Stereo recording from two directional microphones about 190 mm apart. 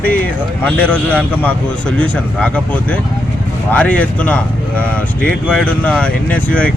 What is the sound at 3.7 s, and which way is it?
Speech, 5° left (ahead or behind).